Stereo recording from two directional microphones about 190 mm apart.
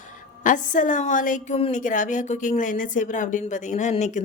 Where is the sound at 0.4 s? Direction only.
45° left (ahead or behind).